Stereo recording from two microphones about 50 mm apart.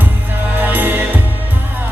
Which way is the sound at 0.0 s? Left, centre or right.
Right.